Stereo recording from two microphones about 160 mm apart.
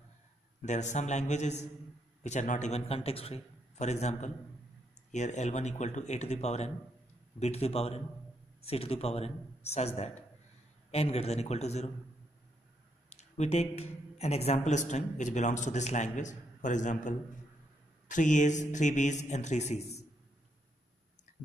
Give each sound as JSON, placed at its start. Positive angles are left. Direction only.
{"t": 0.6, "sound": "speech", "side_deg": 50}
{"t": 13.1, "sound": "speech", "side_deg": 45}